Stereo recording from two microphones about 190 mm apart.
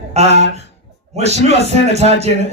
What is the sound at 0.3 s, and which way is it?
Speech, 70° left (ahead or behind).